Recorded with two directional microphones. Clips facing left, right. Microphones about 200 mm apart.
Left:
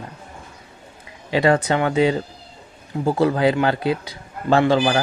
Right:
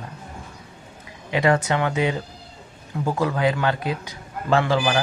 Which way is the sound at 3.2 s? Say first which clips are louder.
Left 4 dB; 35° left (ahead or behind).